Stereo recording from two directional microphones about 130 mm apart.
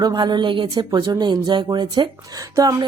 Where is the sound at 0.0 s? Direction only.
35° right (ahead or behind).